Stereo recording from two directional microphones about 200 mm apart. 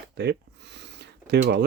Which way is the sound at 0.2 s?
60° right (ahead or behind).